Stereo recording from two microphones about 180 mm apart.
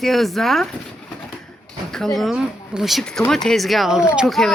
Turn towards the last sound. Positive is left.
turn(degrees=0)  # may be behind; listen again after turning